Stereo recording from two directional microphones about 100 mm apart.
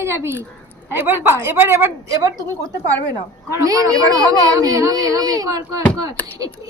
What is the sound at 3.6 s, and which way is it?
A child's voice, 35° right (ahead or behind).